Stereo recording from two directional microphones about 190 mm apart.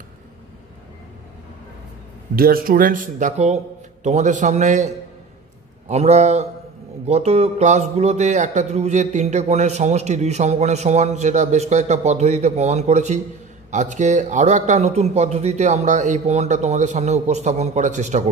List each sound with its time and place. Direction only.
2.3 s a man's voice: 50° right (ahead or behind)